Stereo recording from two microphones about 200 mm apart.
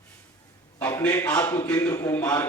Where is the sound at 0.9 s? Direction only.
15° left (ahead or behind).